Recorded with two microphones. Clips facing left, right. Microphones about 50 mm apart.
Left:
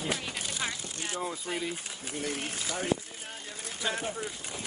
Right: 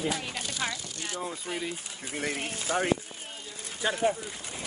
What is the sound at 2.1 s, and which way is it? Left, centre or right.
Speech, right.